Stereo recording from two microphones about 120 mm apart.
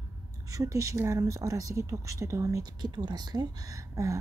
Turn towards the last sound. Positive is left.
turn(degrees=-25)  # may be behind; listen again after turning